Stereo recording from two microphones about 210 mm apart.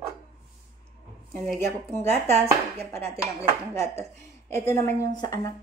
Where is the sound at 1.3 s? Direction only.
Centre (ahead or behind).